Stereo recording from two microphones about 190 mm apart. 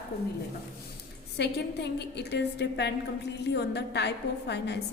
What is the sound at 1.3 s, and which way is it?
A woman's voice, 60° left (ahead or behind).